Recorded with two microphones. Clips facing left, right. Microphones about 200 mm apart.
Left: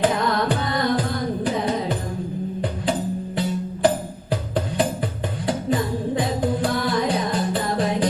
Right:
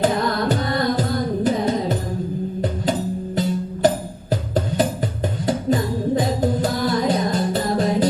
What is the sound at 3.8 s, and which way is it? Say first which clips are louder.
Music: right 1 dB; 40° right (ahead or behind).